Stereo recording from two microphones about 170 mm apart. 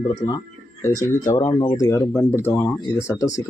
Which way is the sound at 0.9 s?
50° left (ahead or behind).